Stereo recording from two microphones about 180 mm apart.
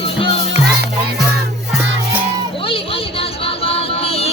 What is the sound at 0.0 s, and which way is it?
Music, 30° left (ahead or behind).